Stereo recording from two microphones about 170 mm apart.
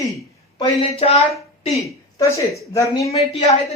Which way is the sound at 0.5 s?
30° left (ahead or behind).